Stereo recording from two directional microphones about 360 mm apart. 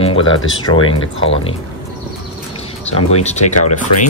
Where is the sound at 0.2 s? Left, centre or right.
Left.